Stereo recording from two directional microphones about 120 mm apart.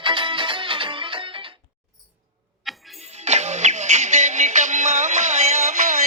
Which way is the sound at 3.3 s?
70° right (ahead or behind).